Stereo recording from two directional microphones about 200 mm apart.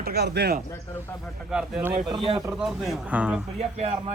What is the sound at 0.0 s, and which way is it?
Speech, 55° right (ahead or behind).